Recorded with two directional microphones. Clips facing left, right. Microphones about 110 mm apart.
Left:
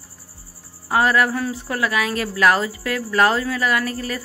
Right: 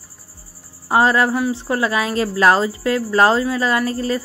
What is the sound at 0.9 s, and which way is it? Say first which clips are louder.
Speech: right 3 dB; 25° right (ahead or behind).